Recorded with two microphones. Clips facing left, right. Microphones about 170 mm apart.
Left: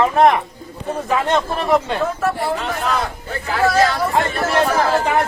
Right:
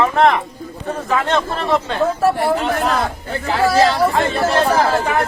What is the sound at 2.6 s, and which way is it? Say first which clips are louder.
Speech: right 3 dB; 35° right (ahead or behind).